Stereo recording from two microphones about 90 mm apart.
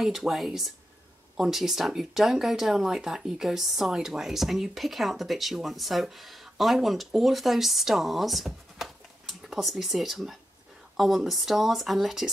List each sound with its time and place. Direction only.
0.0 s speech: centre (ahead or behind)